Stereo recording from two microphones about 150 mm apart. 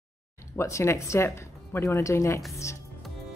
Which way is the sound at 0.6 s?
20° left (ahead or behind).